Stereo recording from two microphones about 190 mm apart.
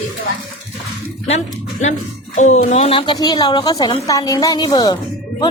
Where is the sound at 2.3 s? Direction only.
40° left (ahead or behind); by 5.0 s 25° left (ahead or behind).